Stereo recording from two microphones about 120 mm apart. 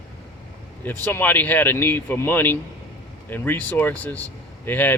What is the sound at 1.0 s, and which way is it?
Speech, 15° left (ahead or behind).